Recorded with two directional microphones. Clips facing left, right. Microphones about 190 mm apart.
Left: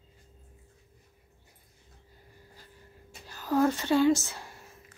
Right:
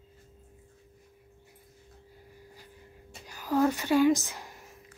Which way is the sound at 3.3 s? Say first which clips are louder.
Even; 10° right (ahead or behind).